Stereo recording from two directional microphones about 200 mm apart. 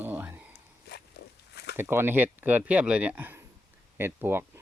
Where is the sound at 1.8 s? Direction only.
10° right (ahead or behind).